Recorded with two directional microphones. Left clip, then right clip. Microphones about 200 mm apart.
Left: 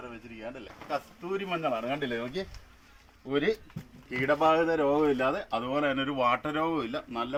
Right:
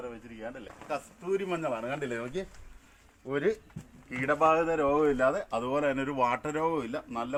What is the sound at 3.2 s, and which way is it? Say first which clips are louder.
Speech: left 1 dB; 5° right (ahead or behind).